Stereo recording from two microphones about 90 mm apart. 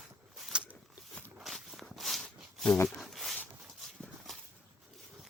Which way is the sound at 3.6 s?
Centre (ahead or behind).